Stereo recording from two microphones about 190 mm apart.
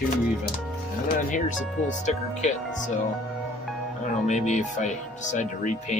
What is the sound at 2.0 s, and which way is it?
Speech, 40° left (ahead or behind).